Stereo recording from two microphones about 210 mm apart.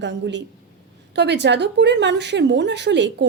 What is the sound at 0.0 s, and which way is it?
A woman's voice, 55° right (ahead or behind).